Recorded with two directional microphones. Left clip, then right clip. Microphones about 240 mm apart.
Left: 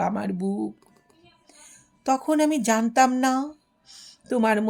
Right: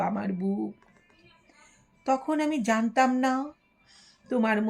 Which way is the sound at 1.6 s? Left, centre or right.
Left.